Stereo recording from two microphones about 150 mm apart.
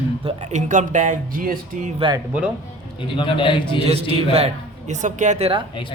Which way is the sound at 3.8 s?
40° right (ahead or behind).